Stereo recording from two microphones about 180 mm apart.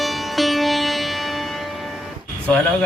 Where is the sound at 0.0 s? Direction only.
Centre (ahead or behind).